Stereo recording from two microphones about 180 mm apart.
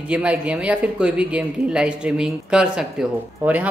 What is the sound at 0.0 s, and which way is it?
Speech, 5° right (ahead or behind).